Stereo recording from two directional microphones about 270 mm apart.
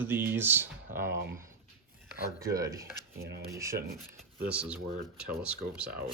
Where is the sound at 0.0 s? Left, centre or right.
Centre.